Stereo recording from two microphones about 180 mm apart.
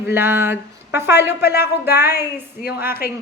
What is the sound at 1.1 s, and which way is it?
Speech, 65° left (ahead or behind).